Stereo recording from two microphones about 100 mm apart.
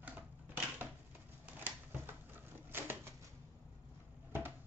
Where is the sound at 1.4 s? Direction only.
20° right (ahead or behind).